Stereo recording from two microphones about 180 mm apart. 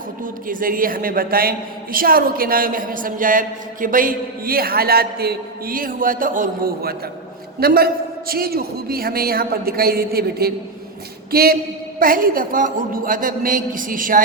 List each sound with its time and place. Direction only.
0.4 s a woman's voice: 50° right (ahead or behind)